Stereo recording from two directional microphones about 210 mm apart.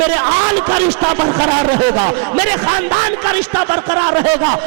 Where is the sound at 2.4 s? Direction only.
15° right (ahead or behind).